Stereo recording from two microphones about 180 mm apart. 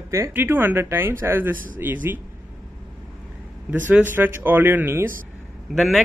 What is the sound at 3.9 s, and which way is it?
Speech, 10° right (ahead or behind).